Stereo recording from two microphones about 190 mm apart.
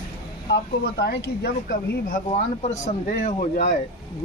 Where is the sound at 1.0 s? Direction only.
55° left (ahead or behind); by 3.8 s 35° left (ahead or behind).